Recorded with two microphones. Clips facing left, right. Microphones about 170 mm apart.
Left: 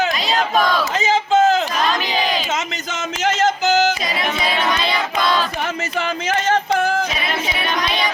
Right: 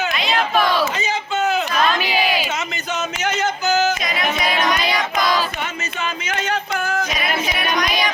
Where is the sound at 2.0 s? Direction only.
10° right (ahead or behind).